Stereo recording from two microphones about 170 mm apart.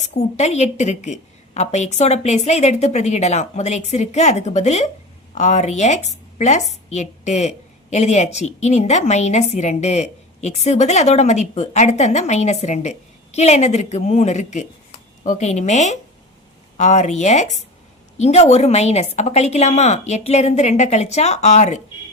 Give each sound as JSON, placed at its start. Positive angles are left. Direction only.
{"t": 0.2, "sound": "a woman's voice", "side_deg": 40}